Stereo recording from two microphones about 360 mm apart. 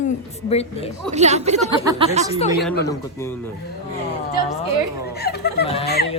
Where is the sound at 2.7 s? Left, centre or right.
Centre.